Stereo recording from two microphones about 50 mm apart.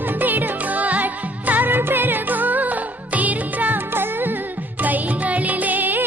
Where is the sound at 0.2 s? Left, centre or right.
Right.